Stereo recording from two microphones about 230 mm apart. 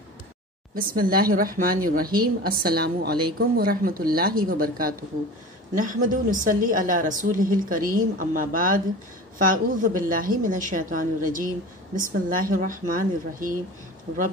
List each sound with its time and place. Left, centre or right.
0.7 s a woman's voice: right
6.0 s a woman's voice: right
14.1 s a woman's voice: right